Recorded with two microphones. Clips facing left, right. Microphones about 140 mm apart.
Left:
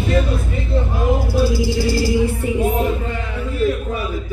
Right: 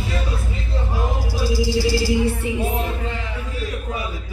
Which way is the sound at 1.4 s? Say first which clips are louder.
Left 3 dB; 55° left (ahead or behind).